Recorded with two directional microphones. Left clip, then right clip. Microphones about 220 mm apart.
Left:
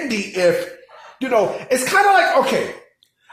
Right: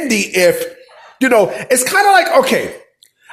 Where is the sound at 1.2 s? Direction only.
55° right (ahead or behind).